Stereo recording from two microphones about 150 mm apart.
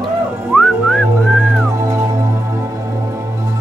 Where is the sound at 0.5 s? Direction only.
Centre (ahead or behind).